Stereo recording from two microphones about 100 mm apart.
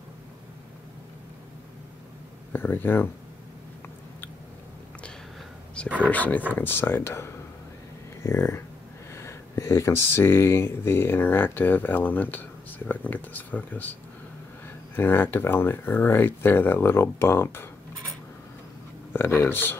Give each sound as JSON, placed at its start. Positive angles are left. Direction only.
{"t": 2.5, "sound": "speech", "side_deg": 20}
{"t": 6.0, "sound": "speech", "side_deg": 15}
{"t": 15.0, "sound": "speech", "side_deg": 20}
{"t": 19.1, "sound": "speech", "side_deg": 25}